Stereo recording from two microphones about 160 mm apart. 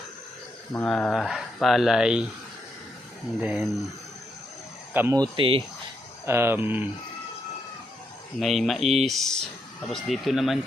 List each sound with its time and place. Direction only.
0.7 s speech: 10° left (ahead or behind)
3.4 s speech: centre (ahead or behind)
4.9 s speech: 15° right (ahead or behind)
5.4 s speech: 35° right (ahead or behind)
6.2 s speech: 15° right (ahead or behind)
8.4 s speech: centre (ahead or behind)